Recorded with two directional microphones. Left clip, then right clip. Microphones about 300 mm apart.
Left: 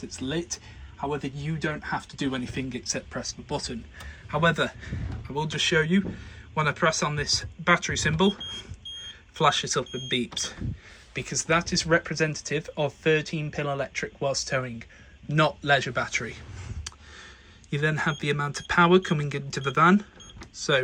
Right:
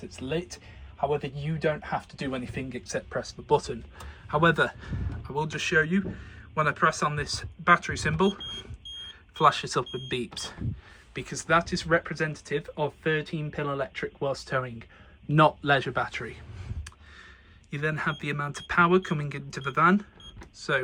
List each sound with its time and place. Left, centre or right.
1.1 s speech: centre
2.1 s speech: left
2.8 s speech: centre
17.7 s speech: centre